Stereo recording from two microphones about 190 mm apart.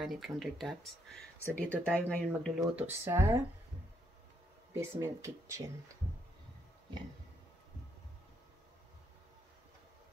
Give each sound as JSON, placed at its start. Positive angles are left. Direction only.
{"t": 0.0, "sound": "speech", "side_deg": 0}
{"t": 2.7, "sound": "speech", "side_deg": -15}
{"t": 4.7, "sound": "speech", "side_deg": -15}